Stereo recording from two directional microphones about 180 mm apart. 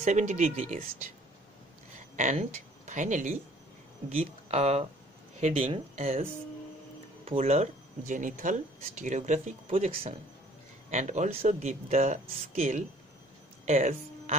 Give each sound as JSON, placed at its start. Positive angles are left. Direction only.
{"t": 0.0, "sound": "speech", "side_deg": -40}
{"t": 2.1, "sound": "speech", "side_deg": -45}
{"t": 4.5, "sound": "speech", "side_deg": -35}
{"t": 7.2, "sound": "speech", "side_deg": -35}